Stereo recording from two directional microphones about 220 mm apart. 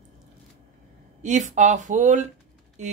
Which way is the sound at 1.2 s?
35° right (ahead or behind).